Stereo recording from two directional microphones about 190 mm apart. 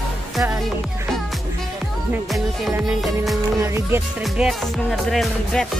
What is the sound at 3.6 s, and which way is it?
Music, 15° right (ahead or behind).